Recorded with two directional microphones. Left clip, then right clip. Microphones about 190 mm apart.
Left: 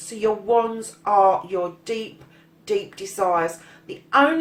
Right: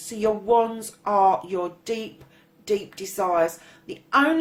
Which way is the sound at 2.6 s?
45° right (ahead or behind).